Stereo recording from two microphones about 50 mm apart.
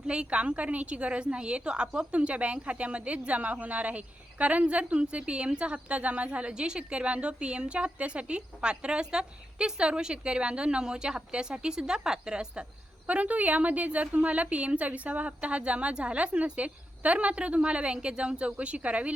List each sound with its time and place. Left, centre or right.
0.1 s a woman's voice: right
13.1 s a woman's voice: right